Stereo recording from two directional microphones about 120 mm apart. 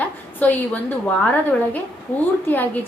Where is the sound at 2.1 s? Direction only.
10° left (ahead or behind).